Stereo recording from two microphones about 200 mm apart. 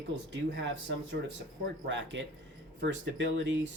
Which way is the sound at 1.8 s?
65° right (ahead or behind).